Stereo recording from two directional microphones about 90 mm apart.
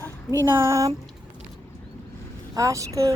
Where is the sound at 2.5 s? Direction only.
40° right (ahead or behind).